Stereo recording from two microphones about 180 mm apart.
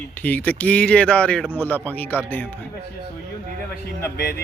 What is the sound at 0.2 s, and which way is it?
Speech, 10° left (ahead or behind).